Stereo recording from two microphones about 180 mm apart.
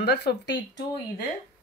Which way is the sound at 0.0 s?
65° left (ahead or behind).